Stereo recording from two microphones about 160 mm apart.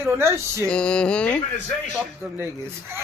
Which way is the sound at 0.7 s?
5° left (ahead or behind).